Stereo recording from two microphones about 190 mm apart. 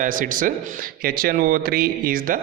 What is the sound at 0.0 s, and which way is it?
A man's voice, 45° right (ahead or behind).